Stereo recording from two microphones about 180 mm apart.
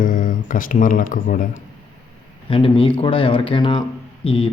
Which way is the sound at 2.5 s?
30° left (ahead or behind).